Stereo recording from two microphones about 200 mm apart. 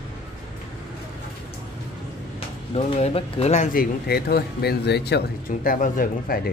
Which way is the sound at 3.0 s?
30° left (ahead or behind).